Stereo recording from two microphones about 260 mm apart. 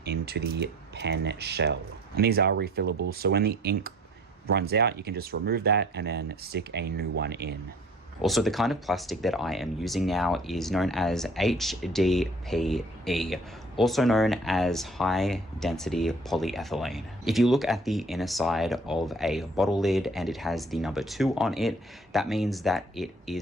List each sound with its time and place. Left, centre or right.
0.0 s speech: right
8.2 s speech: centre